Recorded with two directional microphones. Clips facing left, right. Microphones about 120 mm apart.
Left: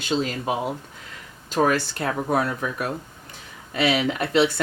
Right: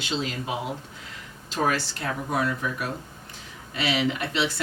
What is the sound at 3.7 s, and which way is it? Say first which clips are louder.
Speech: left 4 dB; 50° left (ahead or behind).